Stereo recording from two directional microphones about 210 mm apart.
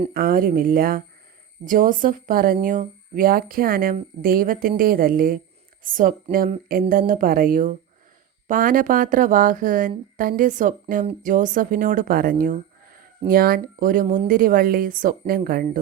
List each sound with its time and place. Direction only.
0.1 s speech: 45° right (ahead or behind)